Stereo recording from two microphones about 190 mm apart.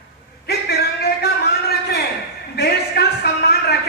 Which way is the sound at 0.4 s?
55° left (ahead or behind).